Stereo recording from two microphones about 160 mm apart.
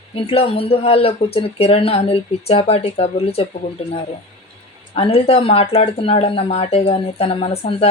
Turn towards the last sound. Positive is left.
turn(degrees=40)  # may be behind; listen again after turning